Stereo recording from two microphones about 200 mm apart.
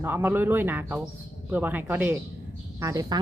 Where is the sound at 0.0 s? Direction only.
10° right (ahead or behind).